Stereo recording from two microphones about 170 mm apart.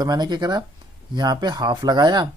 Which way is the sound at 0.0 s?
25° right (ahead or behind).